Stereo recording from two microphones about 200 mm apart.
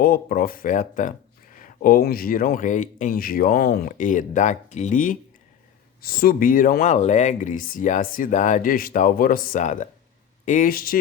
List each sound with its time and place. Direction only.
0.0 s speech: 45° left (ahead or behind)
6.9 s speech: 35° left (ahead or behind)